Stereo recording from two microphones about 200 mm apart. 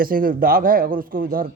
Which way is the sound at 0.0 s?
45° right (ahead or behind).